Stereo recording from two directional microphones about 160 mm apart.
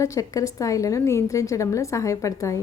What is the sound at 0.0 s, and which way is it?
A woman's voice, 20° left (ahead or behind).